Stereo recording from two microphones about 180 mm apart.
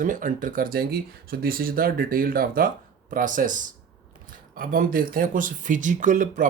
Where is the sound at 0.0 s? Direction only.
45° right (ahead or behind).